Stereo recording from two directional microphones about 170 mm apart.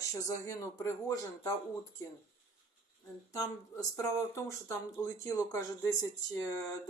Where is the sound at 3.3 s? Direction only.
20° left (ahead or behind).